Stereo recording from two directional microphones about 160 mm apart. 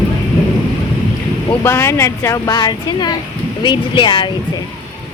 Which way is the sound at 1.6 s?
15° left (ahead or behind).